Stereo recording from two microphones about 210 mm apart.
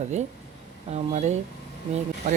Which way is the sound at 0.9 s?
30° right (ahead or behind).